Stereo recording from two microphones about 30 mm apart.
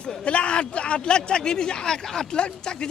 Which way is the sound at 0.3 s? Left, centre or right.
Left.